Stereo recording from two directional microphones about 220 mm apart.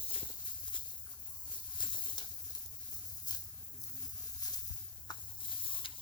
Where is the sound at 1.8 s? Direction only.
20° left (ahead or behind).